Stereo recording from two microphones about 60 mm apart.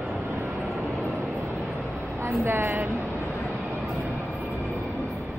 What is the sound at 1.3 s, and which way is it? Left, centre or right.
Vehicle, right.